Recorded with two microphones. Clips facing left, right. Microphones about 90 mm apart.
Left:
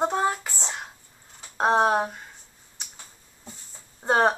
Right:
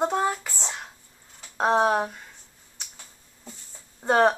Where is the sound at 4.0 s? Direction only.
20° left (ahead or behind).